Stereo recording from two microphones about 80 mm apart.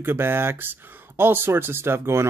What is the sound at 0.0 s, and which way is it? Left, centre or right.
Speech, right.